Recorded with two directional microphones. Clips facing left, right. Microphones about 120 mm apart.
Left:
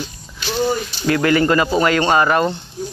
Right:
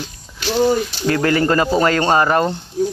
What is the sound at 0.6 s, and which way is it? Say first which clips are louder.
Speech: right 4 dB; 35° right (ahead or behind).